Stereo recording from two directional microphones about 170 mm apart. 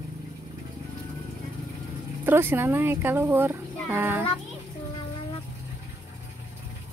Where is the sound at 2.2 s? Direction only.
15° right (ahead or behind).